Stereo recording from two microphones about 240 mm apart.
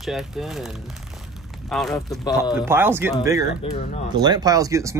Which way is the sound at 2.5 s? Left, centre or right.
Centre.